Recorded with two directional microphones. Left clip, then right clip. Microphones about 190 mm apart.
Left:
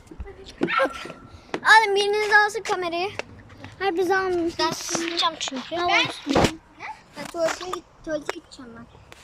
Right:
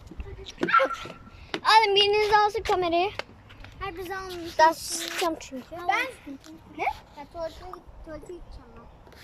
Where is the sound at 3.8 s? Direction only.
60° left (ahead or behind).